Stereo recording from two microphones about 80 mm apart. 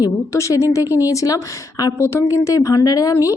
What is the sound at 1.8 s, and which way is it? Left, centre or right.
A woman's voice, left.